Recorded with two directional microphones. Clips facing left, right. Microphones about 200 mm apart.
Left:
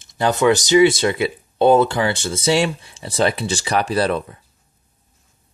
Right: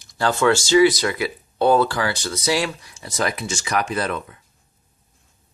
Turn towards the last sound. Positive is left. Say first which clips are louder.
# left 6 dB
turn(degrees=30)  # may be behind; listen again after turning